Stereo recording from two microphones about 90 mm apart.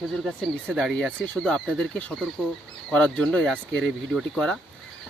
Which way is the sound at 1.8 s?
15° left (ahead or behind).